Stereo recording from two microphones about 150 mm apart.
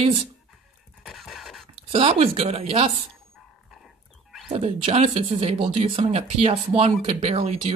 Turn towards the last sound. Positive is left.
turn(degrees=-40)  # may be behind; listen again after turning